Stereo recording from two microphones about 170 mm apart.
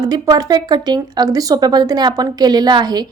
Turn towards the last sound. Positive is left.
turn(degrees=-25)  # may be behind; listen again after turning